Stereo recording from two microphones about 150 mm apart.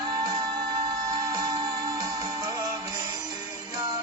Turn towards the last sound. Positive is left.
turn(degrees=-25)  # may be behind; listen again after turning